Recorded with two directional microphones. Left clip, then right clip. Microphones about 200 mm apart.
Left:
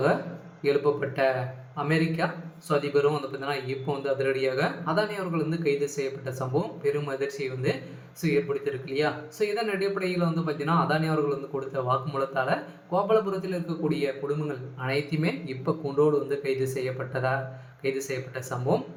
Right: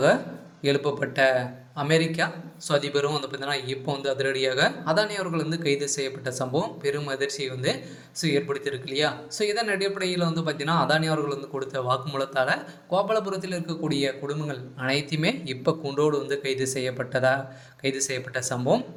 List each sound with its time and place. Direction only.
0.6 s speech: 35° right (ahead or behind)